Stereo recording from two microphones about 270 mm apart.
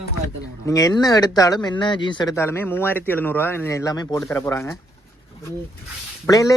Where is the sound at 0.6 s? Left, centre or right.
Centre.